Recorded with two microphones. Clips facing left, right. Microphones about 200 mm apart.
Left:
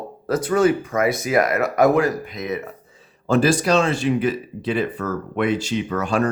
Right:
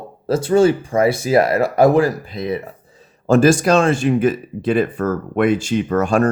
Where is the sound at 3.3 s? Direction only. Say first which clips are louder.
Right 4 dB; 45° right (ahead or behind).